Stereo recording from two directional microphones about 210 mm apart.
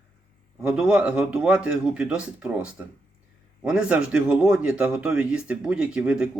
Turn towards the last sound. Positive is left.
turn(degrees=-5)  # may be behind; listen again after turning